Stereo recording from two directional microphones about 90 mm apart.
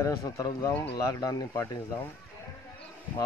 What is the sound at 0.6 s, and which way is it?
Speech, 40° left (ahead or behind).